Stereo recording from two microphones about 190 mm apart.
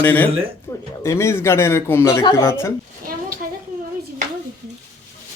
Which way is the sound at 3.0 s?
50° right (ahead or behind).